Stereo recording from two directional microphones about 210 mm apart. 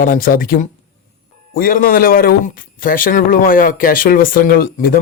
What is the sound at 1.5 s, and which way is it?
A man's voice, 40° left (ahead or behind).